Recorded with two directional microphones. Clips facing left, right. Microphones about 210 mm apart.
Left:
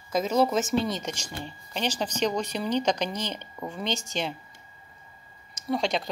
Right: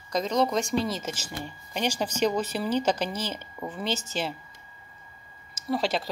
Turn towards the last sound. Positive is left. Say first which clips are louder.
# even
turn(degrees=-5)  # may be behind; listen again after turning